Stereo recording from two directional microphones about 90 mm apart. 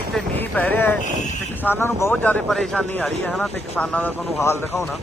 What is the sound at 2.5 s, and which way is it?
Speech, 5° left (ahead or behind).